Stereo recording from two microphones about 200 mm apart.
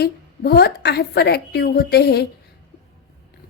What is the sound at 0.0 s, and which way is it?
A woman's voice, 55° left (ahead or behind).